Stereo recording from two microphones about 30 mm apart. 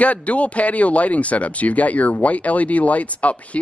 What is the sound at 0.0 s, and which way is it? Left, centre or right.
Speech, left.